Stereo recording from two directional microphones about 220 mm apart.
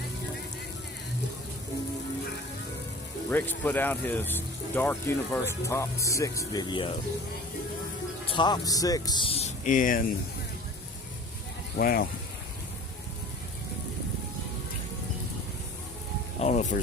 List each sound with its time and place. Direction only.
3.2 s speech: 10° left (ahead or behind)
8.4 s speech: 15° left (ahead or behind); by 10.0 s 35° left (ahead or behind)
11.8 s speech: 40° left (ahead or behind)
16.4 s speech: 30° left (ahead or behind)